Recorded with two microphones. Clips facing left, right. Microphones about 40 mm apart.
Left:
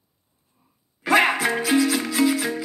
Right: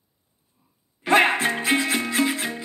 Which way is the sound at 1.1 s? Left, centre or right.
Right.